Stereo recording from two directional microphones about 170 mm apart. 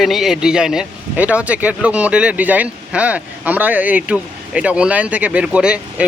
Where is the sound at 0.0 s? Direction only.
Centre (ahead or behind).